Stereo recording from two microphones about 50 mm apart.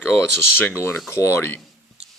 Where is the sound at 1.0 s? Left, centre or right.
Left.